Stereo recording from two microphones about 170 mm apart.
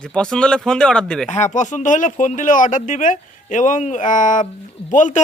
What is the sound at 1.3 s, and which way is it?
Speech, 45° left (ahead or behind).